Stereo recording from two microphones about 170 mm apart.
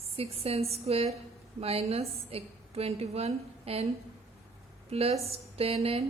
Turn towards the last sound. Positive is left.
turn(degrees=-35)  # may be behind; listen again after turning